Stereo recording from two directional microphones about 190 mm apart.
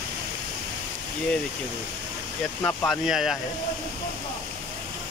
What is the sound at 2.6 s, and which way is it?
Speech, 5° left (ahead or behind).